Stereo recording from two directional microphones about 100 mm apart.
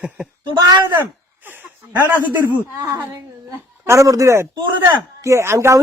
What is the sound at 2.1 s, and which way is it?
Speech, 15° right (ahead or behind).